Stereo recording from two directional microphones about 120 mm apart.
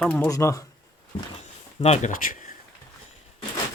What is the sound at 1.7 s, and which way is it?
Speech, 60° left (ahead or behind).